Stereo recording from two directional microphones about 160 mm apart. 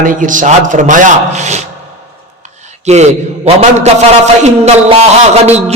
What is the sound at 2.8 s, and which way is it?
A man's voice, 45° right (ahead or behind).